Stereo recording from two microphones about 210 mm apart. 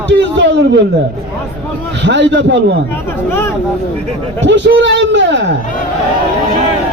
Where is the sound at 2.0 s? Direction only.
55° right (ahead or behind).